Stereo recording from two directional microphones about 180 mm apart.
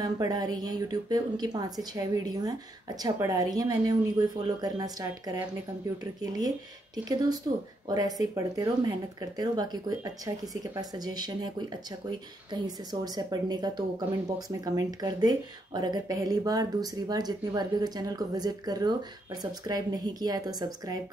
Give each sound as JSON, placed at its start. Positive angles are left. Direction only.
{"t": 0.0, "sound": "speech", "side_deg": -20}
{"t": 7.5, "sound": "speech", "side_deg": -25}